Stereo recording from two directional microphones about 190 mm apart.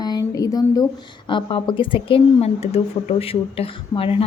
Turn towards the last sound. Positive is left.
turn(degrees=30)  # may be behind; listen again after turning